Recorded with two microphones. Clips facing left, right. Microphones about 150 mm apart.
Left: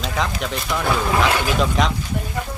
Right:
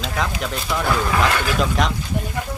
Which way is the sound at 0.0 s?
Centre (ahead or behind).